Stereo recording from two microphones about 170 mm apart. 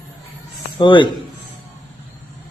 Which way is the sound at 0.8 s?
30° left (ahead or behind).